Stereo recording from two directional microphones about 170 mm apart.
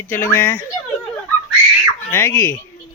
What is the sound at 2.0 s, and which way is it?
Speech, 15° left (ahead or behind).